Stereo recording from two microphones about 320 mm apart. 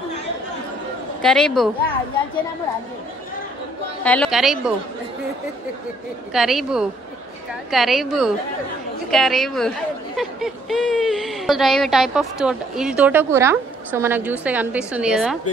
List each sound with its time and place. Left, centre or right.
1.2 s speech: centre
4.0 s speech: centre
6.3 s speech: centre